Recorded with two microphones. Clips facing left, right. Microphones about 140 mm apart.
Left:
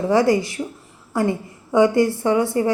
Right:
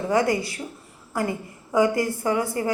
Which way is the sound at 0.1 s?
25° left (ahead or behind).